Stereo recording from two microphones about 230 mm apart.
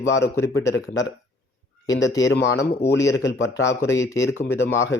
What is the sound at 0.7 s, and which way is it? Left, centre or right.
Speech, left.